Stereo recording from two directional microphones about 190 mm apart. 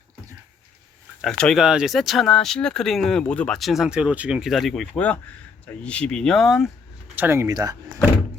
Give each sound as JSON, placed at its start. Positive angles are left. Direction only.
{"t": 1.2, "sound": "speech", "side_deg": 5}
{"t": 7.2, "sound": "speech", "side_deg": -15}